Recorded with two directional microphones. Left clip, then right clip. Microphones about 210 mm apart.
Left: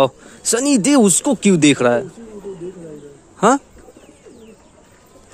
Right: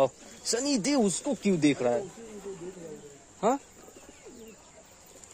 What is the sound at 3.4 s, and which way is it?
Speech, 20° left (ahead or behind).